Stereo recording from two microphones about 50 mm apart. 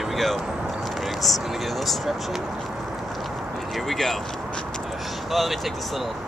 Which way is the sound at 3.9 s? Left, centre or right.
Centre.